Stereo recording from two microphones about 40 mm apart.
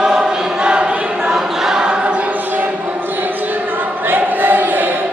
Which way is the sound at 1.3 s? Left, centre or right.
Centre.